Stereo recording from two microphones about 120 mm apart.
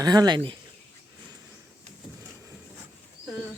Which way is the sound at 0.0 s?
35° right (ahead or behind).